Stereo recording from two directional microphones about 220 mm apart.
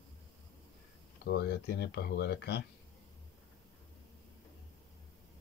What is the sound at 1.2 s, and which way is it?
Rub, 50° left (ahead or behind).